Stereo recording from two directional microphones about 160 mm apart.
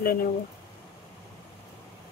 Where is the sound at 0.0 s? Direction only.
65° left (ahead or behind).